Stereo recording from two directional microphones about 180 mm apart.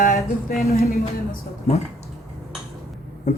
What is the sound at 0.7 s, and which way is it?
Music, 60° left (ahead or behind).